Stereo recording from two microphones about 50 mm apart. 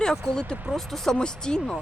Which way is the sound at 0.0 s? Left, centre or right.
Centre.